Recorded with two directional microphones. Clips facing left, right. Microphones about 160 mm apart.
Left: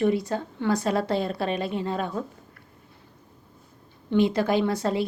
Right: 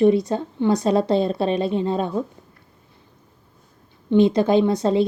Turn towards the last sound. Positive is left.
turn(degrees=-20)  # may be behind; listen again after turning